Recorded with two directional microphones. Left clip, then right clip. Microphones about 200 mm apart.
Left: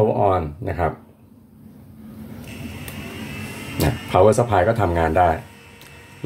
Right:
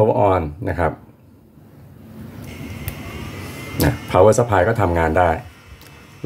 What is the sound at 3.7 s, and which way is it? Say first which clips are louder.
Speech: right 2 dB; 15° right (ahead or behind).